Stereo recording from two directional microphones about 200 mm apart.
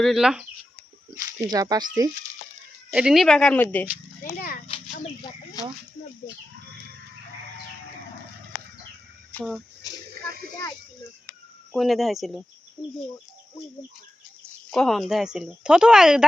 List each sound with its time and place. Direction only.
0.0 s a woman's voice: centre (ahead or behind)
1.1 s speech: 15° right (ahead or behind)
2.9 s a woman's voice: 5° right (ahead or behind)
4.2 s a child's voice: 45° left (ahead or behind)
9.3 s speech: centre (ahead or behind)
11.7 s a woman's voice: centre (ahead or behind)
14.7 s a woman's voice: centre (ahead or behind)